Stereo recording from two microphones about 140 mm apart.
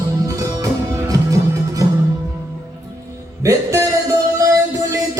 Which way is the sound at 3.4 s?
20° right (ahead or behind).